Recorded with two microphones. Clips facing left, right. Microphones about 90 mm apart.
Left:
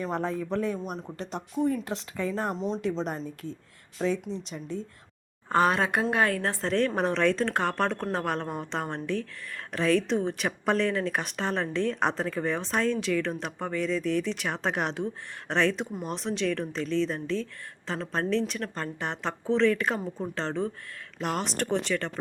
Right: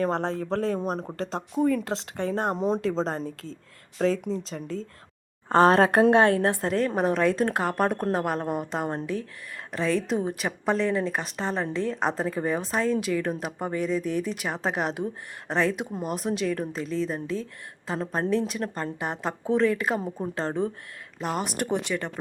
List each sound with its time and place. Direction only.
0.0 s speech: 85° right
0.8 s speech: 55° right (ahead or behind)
1.1 s speech: 90° right; by 2.8 s 55° right (ahead or behind)
3.2 s a woman's voice: 65° right (ahead or behind)
3.9 s speech: 85° right
5.5 s speech: 35° right (ahead or behind)
6.1 s speech: 25° right (ahead or behind)
9.7 s a woman's voice: centre (ahead or behind)